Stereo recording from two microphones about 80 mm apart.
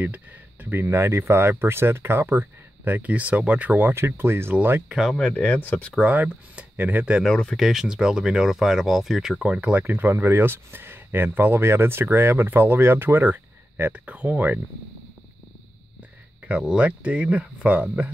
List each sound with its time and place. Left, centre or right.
0.7 s speech: right
4.8 s speech: centre
5.1 s speech: centre
6.0 s speech: centre
7.2 s speech: centre
7.5 s speech: centre
9.4 s speech: centre
16.4 s speech: centre